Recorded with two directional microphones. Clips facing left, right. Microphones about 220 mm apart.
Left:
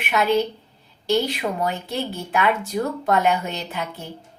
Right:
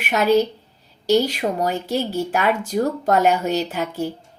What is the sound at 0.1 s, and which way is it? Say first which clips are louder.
A woman's voice: right 3 dB; 40° right (ahead or behind).